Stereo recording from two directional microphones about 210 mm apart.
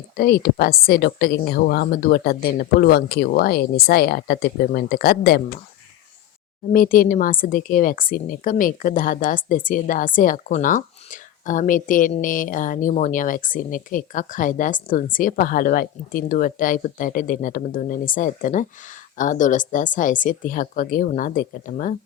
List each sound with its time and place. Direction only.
0.2 s a woman's voice: 45° left (ahead or behind)
6.7 s a woman's voice: 40° left (ahead or behind)